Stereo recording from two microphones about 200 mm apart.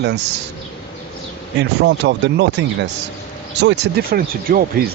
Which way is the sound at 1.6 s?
60° right (ahead or behind).